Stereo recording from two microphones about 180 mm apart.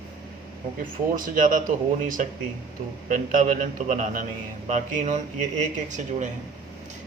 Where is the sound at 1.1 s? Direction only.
50° right (ahead or behind).